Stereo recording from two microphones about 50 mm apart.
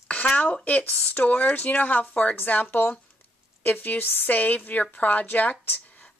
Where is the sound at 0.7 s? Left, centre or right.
Left.